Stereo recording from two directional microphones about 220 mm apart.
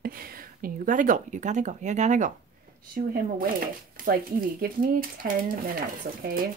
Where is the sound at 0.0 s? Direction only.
40° right (ahead or behind).